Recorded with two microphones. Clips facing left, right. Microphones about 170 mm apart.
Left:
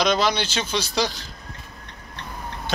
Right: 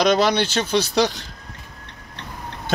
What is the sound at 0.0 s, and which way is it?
Speech, 55° right (ahead or behind).